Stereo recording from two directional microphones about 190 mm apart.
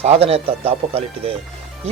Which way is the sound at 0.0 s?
35° right (ahead or behind).